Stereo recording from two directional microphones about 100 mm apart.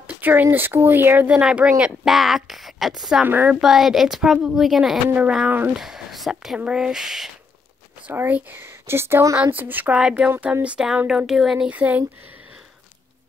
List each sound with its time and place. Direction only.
0.0 s speech: 15° right (ahead or behind)
3.3 s a woman's voice: 20° right (ahead or behind)
3.6 s speech: centre (ahead or behind)
5.8 s speech: 5° right (ahead or behind)
8.0 s a woman's voice: 20° right (ahead or behind)